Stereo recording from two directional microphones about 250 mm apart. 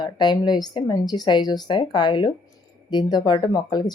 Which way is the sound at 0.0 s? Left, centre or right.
Centre.